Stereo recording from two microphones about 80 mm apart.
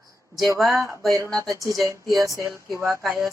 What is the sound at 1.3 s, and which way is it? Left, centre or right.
A woman's voice, right.